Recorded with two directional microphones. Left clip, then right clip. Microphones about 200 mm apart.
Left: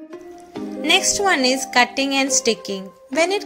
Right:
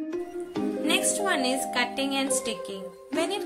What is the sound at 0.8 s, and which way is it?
A woman's voice, 25° left (ahead or behind).